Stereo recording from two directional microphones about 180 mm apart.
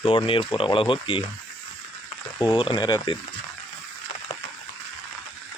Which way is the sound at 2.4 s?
25° left (ahead or behind).